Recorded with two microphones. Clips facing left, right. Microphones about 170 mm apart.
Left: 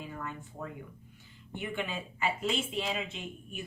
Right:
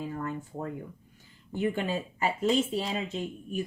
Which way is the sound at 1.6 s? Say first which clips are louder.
Right 7 dB; 40° right (ahead or behind).